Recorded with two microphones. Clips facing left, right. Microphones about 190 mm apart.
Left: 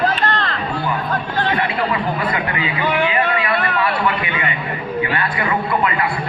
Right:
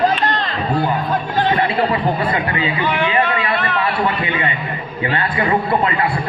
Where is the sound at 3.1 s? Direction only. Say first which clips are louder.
Right 1 dB; 25° right (ahead or behind).